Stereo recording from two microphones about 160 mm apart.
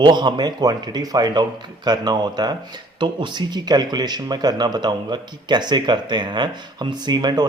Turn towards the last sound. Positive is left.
turn(degrees=-25)  # may be behind; listen again after turning